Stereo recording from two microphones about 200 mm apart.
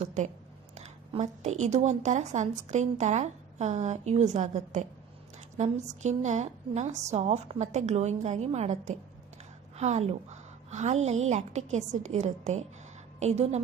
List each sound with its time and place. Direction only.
0.0 s a woman's voice: 35° right (ahead or behind)